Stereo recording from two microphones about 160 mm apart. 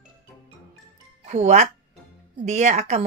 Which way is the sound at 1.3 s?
50° right (ahead or behind).